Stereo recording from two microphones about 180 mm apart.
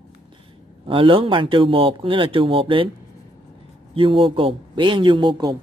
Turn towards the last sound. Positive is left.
turn(degrees=-25)  # may be behind; listen again after turning